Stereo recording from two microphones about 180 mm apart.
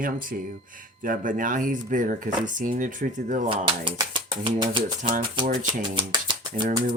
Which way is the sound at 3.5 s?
30° right (ahead or behind).